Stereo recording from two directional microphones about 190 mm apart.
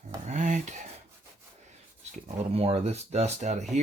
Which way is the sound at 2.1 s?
30° right (ahead or behind).